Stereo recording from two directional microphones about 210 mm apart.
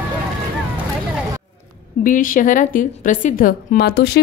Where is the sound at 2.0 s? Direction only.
40° left (ahead or behind).